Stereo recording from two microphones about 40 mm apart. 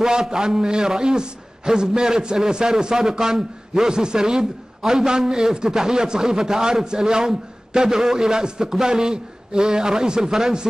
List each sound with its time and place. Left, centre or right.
0.0 s a man's voice: centre